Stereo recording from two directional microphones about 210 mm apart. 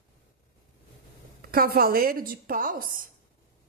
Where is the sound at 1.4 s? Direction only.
45° right (ahead or behind).